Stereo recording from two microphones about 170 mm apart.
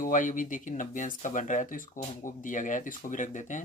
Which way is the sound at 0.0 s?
50° left (ahead or behind).